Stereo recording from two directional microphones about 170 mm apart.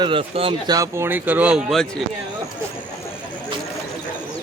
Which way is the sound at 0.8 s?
15° right (ahead or behind).